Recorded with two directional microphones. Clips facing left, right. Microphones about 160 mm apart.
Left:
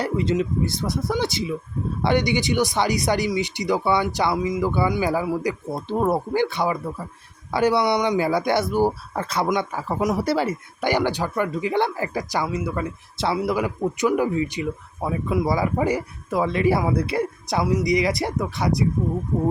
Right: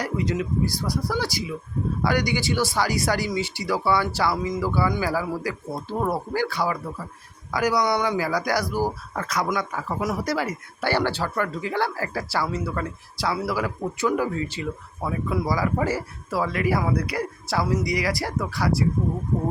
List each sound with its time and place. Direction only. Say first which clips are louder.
0.0 s speech: left 4 dB; 25° left (ahead or behind)
10.8 s speech: left 2 dB; 15° left (ahead or behind)